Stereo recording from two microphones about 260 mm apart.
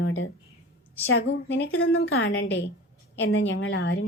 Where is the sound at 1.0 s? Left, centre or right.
Left.